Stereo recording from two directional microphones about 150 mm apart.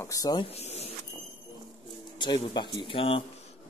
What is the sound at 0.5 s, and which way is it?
Power windows, 45° left (ahead or behind).